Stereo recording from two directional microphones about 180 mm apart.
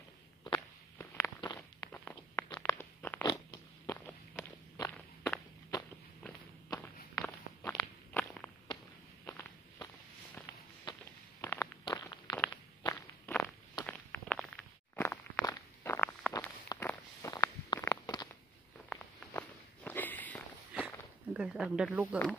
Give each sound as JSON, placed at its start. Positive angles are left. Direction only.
{"t": 0.9, "sound": "walk", "side_deg": 15}
{"t": 1.9, "sound": "walk", "side_deg": 10}
{"t": 2.8, "sound": "crunch", "side_deg": 10}
{"t": 3.3, "sound": "a sound", "side_deg": 20}
{"t": 4.9, "sound": "walk", "side_deg": 10}
{"t": 11.4, "sound": "walk", "side_deg": 15}
{"t": 12.4, "sound": "walk", "side_deg": 10}
{"t": 18.9, "sound": "walk", "side_deg": 5}
{"t": 21.3, "sound": "speech", "side_deg": -5}